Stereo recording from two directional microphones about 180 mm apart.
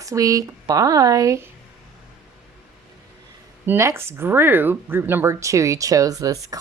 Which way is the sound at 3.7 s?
15° right (ahead or behind).